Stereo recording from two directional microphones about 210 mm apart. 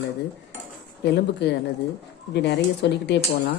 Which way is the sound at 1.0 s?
50° left (ahead or behind).